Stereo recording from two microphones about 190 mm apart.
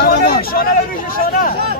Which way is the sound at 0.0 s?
55° left (ahead or behind).